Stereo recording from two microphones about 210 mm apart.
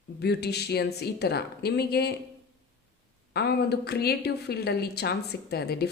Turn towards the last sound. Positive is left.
turn(degrees=50)  # may be behind; listen again after turning